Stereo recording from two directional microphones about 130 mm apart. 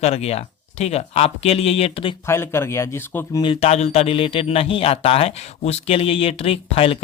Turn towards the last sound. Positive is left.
turn(degrees=45)  # may be behind; listen again after turning